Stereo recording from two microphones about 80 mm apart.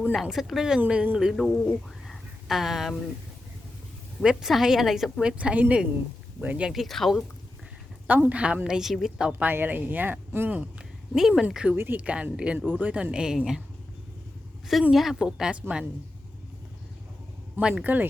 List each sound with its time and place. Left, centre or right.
0.1 s a woman's voice: centre
1.4 s speech: centre
2.0 s a sound: centre
4.2 s a woman's voice: centre
5.2 s speech: centre
6.7 s a woman's voice: centre
8.0 s speech: right
9.4 s speech: right
10.6 s a woman's voice: centre
14.9 s speech: centre
17.6 s speech: centre